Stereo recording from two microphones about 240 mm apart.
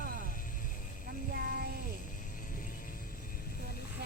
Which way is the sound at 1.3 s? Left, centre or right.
Right.